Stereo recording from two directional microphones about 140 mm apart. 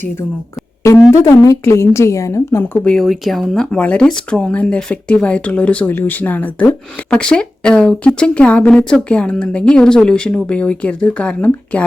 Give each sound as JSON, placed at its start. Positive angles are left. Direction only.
{"t": 0.9, "sound": "a woman's voice", "side_deg": 20}
{"t": 2.8, "sound": "speech", "side_deg": 0}